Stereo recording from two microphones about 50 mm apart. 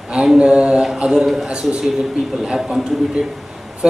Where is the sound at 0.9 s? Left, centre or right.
Centre.